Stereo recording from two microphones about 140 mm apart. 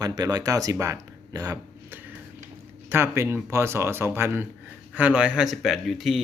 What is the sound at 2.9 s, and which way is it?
Speech, 20° right (ahead or behind).